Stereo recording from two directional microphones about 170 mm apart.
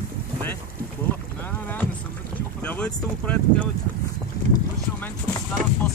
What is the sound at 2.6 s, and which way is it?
Speech, 5° left (ahead or behind).